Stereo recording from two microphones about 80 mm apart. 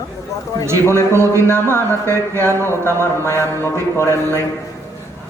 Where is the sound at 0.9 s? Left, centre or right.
Right.